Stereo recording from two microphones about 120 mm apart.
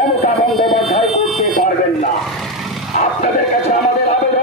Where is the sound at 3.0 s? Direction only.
70° left (ahead or behind).